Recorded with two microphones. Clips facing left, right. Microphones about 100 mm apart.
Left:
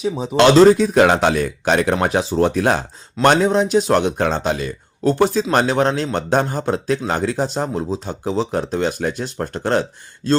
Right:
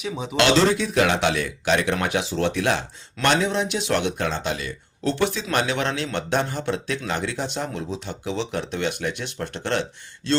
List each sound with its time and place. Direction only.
0.3 s a man's voice: 40° left (ahead or behind)